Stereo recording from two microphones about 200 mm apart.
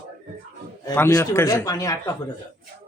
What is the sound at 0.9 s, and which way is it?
Speech, 15° left (ahead or behind).